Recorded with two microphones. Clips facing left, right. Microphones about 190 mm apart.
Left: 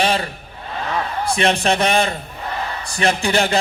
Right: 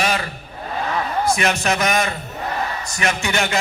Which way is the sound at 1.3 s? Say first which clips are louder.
Left 5 dB; 30° left (ahead or behind).